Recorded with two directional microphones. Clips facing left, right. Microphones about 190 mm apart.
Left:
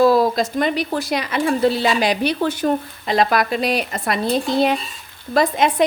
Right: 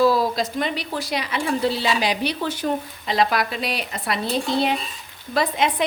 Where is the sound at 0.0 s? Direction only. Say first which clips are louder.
Left 4 dB; 50° left (ahead or behind).